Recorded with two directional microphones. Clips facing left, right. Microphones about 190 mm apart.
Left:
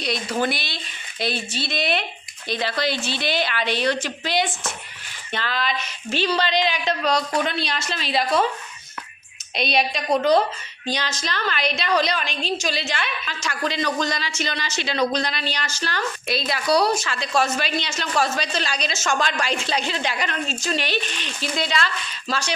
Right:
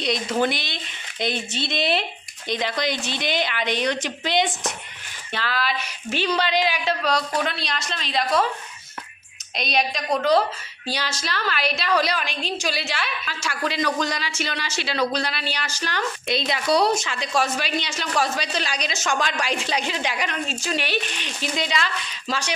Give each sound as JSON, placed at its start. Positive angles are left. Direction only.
{"t": 0.0, "sound": "speech", "side_deg": -20}
{"t": 5.3, "sound": "speech", "side_deg": -5}
{"t": 9.6, "sound": "speech", "side_deg": 0}